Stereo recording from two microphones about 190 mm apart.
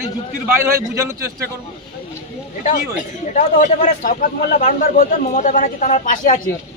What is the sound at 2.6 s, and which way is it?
A man's voice, 45° left (ahead or behind).